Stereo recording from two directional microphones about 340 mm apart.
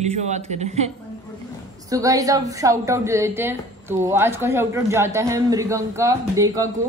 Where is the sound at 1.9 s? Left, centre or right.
Centre.